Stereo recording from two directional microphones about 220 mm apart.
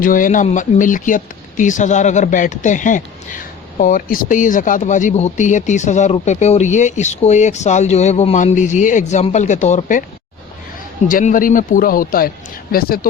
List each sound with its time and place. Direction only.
0.0 s speech: 35° left (ahead or behind)
11.1 s speech: 35° left (ahead or behind)